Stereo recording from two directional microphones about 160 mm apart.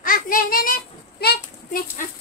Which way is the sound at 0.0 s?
60° left (ahead or behind).